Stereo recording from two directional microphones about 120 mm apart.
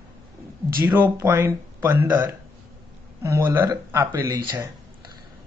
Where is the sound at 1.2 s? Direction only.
20° right (ahead or behind).